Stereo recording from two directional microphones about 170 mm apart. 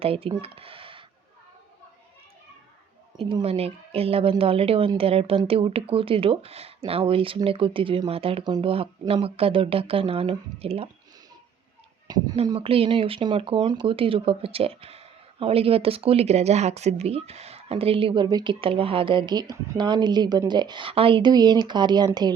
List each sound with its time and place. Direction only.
0.0 s speech: 35° right (ahead or behind)
3.2 s speech: 30° right (ahead or behind)
12.0 s speech: 25° right (ahead or behind)